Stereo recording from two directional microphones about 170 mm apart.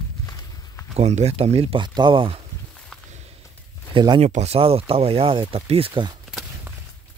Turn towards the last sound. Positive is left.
turn(degrees=-10)  # may be behind; listen again after turning